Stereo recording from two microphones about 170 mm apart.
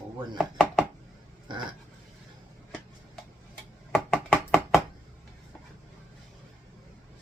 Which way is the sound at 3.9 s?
5° left (ahead or behind).